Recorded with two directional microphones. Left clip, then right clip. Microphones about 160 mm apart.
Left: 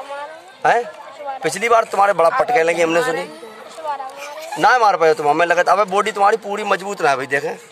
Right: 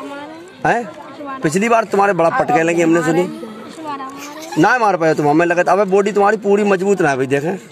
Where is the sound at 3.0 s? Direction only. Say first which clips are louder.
Right 3 dB; 15° left (ahead or behind).